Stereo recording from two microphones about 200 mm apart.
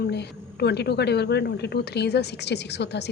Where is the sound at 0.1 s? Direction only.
55° left (ahead or behind).